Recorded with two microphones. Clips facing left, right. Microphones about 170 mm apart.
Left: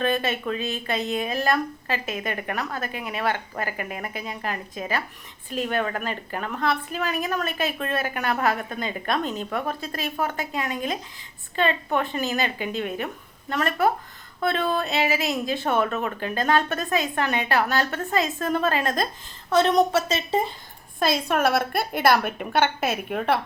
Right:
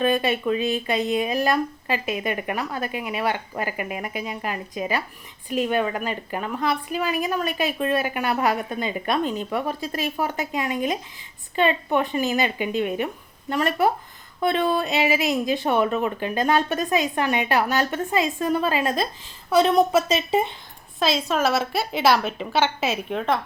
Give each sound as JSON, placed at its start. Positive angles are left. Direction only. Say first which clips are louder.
{"t": 0.0, "sound": "a woman's voice", "louder": "right 3 dB", "side_deg": -15}
{"t": 21.0, "sound": "a woman's voice", "louder": "even", "side_deg": 55}
{"t": 22.2, "sound": "a woman's voice", "louder": "even", "side_deg": 10}